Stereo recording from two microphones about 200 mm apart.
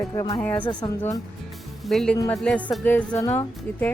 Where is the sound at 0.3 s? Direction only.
10° left (ahead or behind).